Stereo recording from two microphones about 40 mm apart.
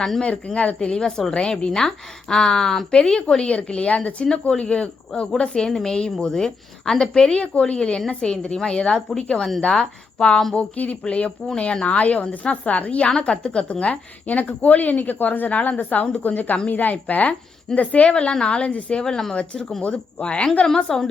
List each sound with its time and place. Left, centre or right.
0.2 s a woman's voice: left
5.7 s a woman's voice: centre
7.3 s a woman's voice: left; by 10.4 s centre
10.5 s a woman's voice: left
18.1 s a woman's voice: left
19.0 s a woman's voice: centre
19.8 s a woman's voice: left
20.8 s a woman's voice: centre